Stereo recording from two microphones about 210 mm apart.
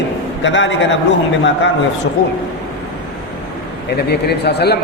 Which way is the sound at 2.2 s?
50° left (ahead or behind).